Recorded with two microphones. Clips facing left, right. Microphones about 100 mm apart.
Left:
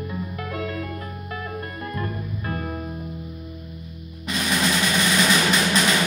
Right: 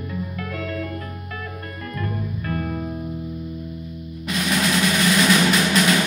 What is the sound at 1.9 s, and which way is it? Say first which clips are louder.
Music: right 4 dB; 20° left (ahead or behind).